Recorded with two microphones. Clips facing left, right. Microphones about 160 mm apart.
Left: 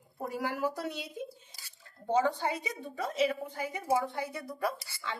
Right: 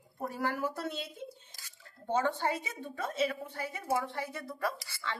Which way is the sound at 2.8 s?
15° left (ahead or behind).